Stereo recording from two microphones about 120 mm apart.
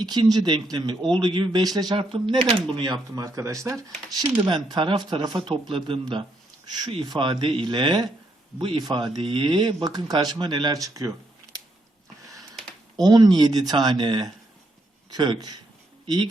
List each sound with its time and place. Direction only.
0.0 s speech: 35° right (ahead or behind)
2.0 s speech: 45° right (ahead or behind)
2.7 s speech: 35° right (ahead or behind)
4.4 s speech: 40° right (ahead or behind)
13.0 s speech: 35° right (ahead or behind)